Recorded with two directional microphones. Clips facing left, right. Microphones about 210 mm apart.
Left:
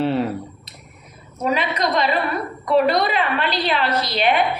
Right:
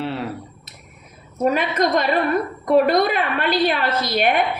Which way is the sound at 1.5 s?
50° right (ahead or behind).